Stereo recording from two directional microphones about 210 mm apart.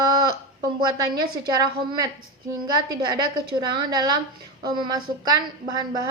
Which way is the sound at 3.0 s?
20° right (ahead or behind).